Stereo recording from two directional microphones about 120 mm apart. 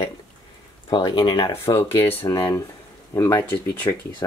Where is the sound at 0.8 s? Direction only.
40° left (ahead or behind).